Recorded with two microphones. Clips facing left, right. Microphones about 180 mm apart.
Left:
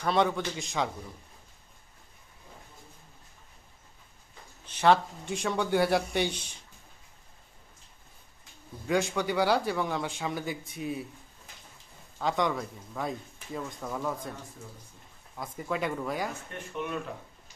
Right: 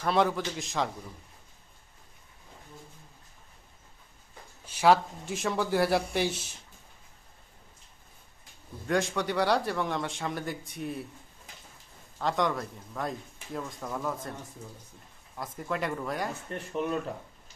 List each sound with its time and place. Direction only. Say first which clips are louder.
0.0 s a man's voice: even; centre (ahead or behind)
4.6 s a man's voice: right 1 dB; 10° right (ahead or behind)
8.9 s a man's voice: left 1 dB; centre (ahead or behind)
12.2 s a man's voice: even; centre (ahead or behind)
15.4 s a man's voice: even; centre (ahead or behind)
16.7 s speech: right 4 dB; 35° right (ahead or behind)